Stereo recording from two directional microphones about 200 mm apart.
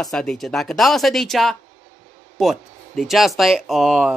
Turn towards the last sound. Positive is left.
turn(degrees=0)  # may be behind; listen again after turning